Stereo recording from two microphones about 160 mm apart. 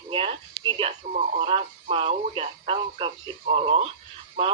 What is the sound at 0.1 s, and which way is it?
Speech, 35° right (ahead or behind).